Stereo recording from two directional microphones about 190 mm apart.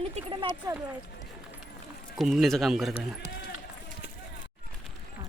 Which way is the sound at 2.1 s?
Centre (ahead or behind).